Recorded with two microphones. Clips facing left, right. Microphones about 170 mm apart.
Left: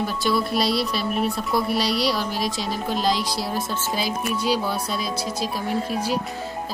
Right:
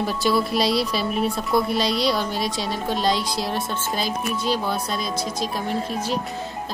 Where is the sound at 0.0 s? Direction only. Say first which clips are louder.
Right 2 dB; centre (ahead or behind).